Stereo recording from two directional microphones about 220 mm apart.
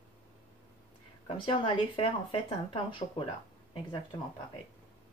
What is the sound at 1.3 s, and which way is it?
Speech, 20° left (ahead or behind).